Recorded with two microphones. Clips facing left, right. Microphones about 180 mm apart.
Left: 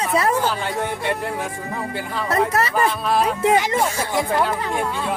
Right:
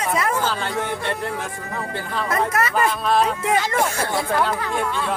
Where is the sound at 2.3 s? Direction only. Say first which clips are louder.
Left 2 dB; 30° left (ahead or behind).